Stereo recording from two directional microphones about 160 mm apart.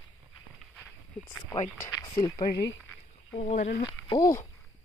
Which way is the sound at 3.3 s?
45° left (ahead or behind).